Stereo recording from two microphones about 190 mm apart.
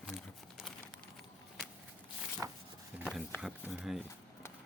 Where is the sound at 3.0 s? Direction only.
Centre (ahead or behind).